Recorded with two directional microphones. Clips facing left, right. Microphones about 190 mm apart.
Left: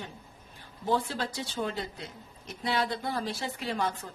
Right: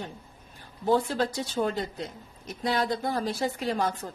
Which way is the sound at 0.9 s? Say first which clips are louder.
Right 5 dB; 45° right (ahead or behind).